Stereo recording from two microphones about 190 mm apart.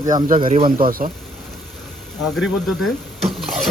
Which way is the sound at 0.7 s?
45° right (ahead or behind).